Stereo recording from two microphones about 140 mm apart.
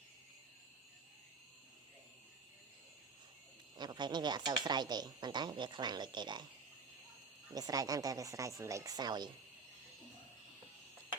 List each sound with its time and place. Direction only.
3.8 s speech: 30° right (ahead or behind)
7.5 s speech: 25° right (ahead or behind)